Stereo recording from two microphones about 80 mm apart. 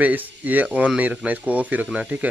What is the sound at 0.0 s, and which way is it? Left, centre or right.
Speech, right.